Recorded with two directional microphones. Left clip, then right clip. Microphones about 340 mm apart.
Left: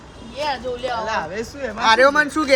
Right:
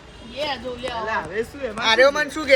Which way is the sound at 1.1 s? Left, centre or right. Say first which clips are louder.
Left 1 dB; left.